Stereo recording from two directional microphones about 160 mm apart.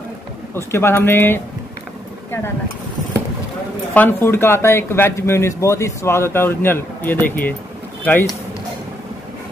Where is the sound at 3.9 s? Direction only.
10° left (ahead or behind).